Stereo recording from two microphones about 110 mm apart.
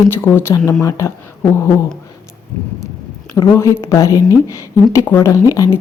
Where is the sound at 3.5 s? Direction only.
30° left (ahead or behind).